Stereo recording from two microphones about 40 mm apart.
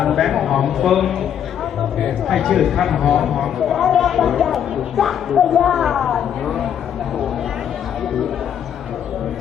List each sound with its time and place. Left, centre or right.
0.0 s speech: centre